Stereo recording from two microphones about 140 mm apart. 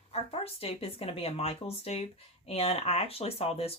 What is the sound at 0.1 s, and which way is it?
Speech, 45° left (ahead or behind).